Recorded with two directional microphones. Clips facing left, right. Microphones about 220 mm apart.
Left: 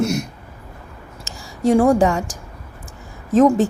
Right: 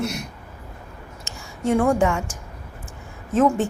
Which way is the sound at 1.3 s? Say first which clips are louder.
Left 5 dB; 35° left (ahead or behind).